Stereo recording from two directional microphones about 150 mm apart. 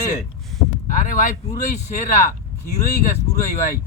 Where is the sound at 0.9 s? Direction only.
60° left (ahead or behind).